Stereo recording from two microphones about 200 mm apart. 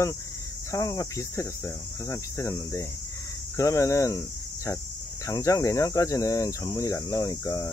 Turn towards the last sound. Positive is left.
turn(degrees=15)  # may be behind; listen again after turning